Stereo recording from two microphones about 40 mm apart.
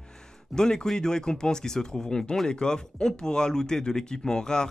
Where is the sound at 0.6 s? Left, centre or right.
Centre.